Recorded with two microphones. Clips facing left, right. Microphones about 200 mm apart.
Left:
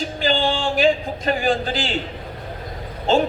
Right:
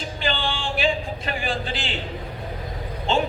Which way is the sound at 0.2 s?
40° left (ahead or behind).